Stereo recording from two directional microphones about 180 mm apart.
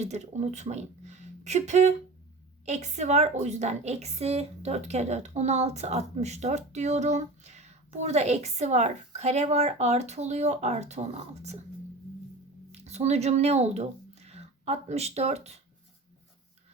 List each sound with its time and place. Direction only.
0.0 s a woman's voice: 40° right (ahead or behind)
12.7 s speech: 35° right (ahead or behind)